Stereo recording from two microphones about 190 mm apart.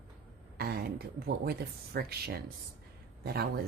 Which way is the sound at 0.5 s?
55° right (ahead or behind).